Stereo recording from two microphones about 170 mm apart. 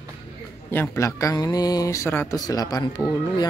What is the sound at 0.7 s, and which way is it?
Speech, 15° left (ahead or behind).